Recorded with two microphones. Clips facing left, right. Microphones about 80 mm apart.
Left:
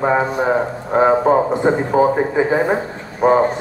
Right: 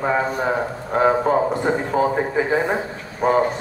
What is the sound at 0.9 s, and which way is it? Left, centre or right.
Speech, centre.